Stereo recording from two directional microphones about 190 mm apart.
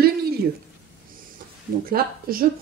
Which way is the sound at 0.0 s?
55° right (ahead or behind).